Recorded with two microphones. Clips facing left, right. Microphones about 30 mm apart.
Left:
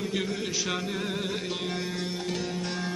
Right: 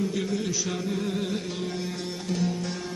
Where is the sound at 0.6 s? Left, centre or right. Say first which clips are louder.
Right 1 dB; left.